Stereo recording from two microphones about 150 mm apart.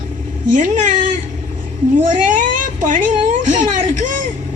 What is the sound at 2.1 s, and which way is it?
A man's voice, 60° right (ahead or behind).